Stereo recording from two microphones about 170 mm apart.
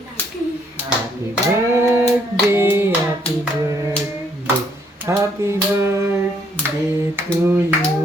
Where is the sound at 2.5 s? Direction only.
15° right (ahead or behind).